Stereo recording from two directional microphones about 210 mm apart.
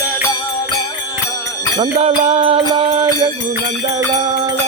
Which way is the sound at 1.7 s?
25° right (ahead or behind).